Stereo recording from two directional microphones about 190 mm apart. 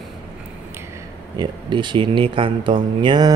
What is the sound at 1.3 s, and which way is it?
Speech, 25° right (ahead or behind).